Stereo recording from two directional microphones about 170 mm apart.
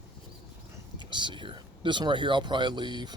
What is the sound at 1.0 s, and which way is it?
Speech, 25° right (ahead or behind).